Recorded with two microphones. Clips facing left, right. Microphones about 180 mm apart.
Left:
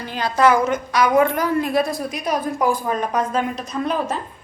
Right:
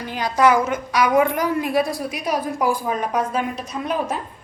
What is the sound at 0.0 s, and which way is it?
A woman's voice, 15° right (ahead or behind).